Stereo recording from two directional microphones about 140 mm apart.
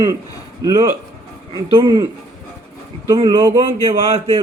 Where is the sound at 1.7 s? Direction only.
35° right (ahead or behind).